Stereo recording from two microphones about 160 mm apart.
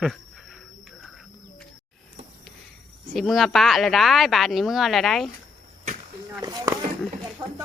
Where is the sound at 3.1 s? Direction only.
Centre (ahead or behind).